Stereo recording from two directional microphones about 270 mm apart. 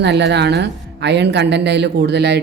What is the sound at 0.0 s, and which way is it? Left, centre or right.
Speech, right.